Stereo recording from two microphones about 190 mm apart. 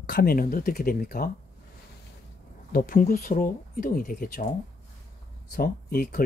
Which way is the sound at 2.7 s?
50° left (ahead or behind).